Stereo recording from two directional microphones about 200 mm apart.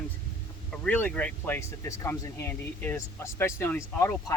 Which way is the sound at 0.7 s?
10° left (ahead or behind).